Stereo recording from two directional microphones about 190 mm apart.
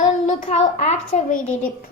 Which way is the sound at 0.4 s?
35° left (ahead or behind).